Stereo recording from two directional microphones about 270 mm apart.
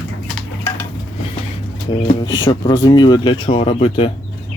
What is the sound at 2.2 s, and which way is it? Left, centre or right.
Speech, centre.